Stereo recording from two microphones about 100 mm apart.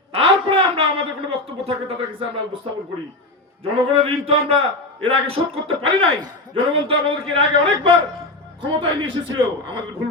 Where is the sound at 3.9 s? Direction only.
70° right (ahead or behind).